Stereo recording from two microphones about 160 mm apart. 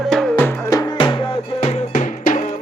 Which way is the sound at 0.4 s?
20° left (ahead or behind).